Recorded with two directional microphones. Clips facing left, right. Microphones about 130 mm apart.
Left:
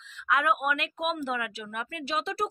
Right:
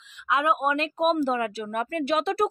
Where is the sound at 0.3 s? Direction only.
25° right (ahead or behind); by 2.1 s 45° right (ahead or behind).